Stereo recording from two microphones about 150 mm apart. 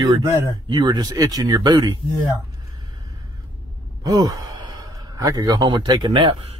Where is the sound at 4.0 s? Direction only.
25° right (ahead or behind).